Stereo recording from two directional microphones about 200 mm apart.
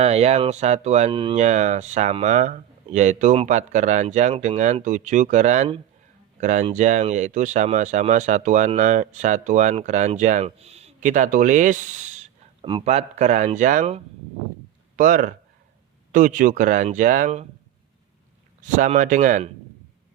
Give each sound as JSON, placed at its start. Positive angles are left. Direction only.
{"t": 0.0, "sound": "speech", "side_deg": -30}
{"t": 1.4, "sound": "speech", "side_deg": -35}
{"t": 18.6, "sound": "speech", "side_deg": -40}